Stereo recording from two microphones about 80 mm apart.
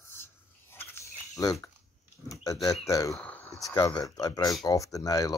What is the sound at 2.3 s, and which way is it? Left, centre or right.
Speech, left.